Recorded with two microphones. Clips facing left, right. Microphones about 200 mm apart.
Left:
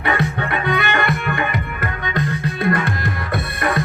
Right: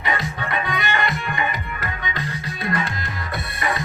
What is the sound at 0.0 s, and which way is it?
Music, 60° left (ahead or behind).